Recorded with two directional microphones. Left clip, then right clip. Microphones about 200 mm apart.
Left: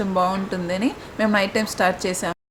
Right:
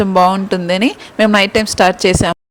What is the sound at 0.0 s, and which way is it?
Speech, 40° right (ahead or behind).